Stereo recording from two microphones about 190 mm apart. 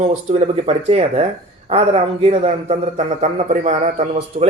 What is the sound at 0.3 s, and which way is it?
Speech, 35° right (ahead or behind).